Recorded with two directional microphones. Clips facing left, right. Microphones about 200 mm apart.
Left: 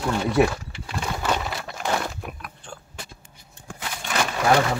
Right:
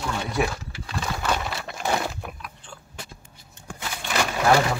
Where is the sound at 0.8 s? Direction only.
15° left (ahead or behind).